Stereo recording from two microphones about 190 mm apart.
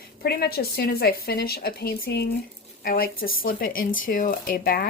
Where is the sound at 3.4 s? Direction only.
45° left (ahead or behind).